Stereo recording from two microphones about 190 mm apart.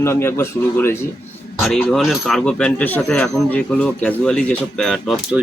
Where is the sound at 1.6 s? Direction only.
5° left (ahead or behind).